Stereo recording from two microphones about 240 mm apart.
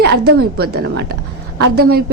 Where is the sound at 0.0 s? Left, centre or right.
Right.